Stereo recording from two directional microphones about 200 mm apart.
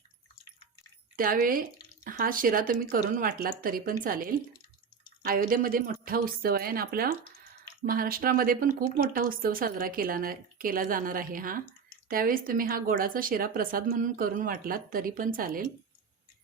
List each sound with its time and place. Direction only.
1.1 s speech: 45° right (ahead or behind)